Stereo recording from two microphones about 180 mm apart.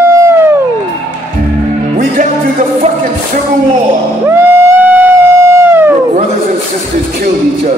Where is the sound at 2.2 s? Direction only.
50° right (ahead or behind).